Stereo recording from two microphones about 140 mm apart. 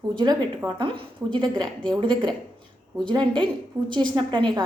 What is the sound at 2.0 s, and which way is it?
A woman's voice, 35° right (ahead or behind).